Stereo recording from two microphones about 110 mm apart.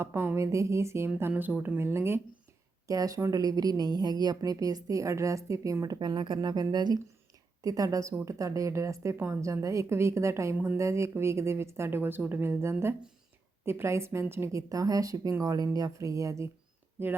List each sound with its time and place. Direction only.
0.0 s a woman's voice: 20° right (ahead or behind)
2.8 s a woman's voice: 30° right (ahead or behind)
17.0 s a woman's voice: 20° right (ahead or behind)